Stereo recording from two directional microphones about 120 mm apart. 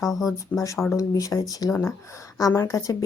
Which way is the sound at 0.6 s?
25° left (ahead or behind).